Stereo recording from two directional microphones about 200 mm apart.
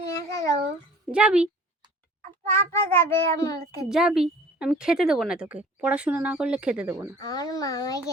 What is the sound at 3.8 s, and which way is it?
A woman's voice, 5° right (ahead or behind).